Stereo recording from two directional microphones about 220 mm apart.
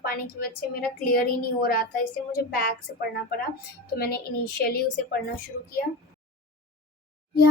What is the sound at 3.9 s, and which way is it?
A woman's voice, 45° left (ahead or behind).